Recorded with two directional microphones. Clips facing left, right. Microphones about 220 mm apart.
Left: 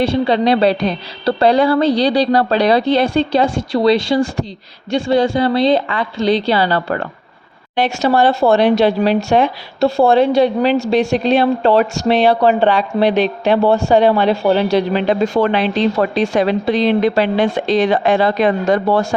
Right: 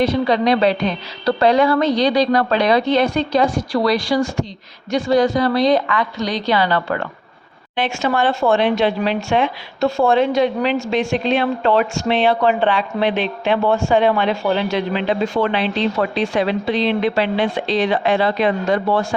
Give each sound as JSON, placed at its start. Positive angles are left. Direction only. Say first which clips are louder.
{"t": 0.0, "sound": "a woman's voice", "louder": "left 2 dB", "side_deg": 30}